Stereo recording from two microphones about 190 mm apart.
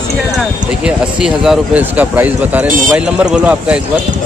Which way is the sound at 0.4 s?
5° right (ahead or behind).